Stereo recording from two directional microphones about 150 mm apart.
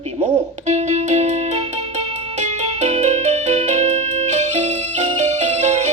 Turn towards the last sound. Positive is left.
turn(degrees=-50)  # may be behind; listen again after turning